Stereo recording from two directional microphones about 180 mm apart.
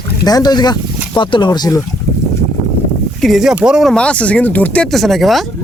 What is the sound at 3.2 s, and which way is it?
Speech, centre (ahead or behind).